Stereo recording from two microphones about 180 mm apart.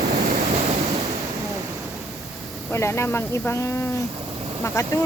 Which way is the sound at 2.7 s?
15° left (ahead or behind).